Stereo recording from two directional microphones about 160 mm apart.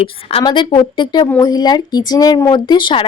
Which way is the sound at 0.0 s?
35° left (ahead or behind).